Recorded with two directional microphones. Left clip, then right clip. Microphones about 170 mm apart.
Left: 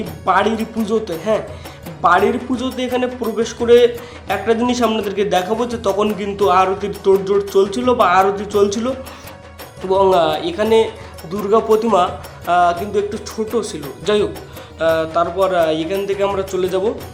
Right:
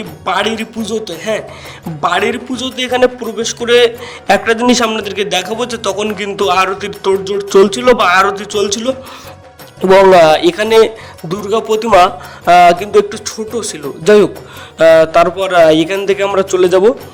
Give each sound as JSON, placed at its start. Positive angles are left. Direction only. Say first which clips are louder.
{"t": 0.3, "sound": "a man's voice", "louder": "right 1 dB", "side_deg": -50}
{"t": 9.9, "sound": "a man's voice", "louder": "right 8 dB", "side_deg": -50}
{"t": 14.8, "sound": "a man's voice", "louder": "right 10 dB", "side_deg": -55}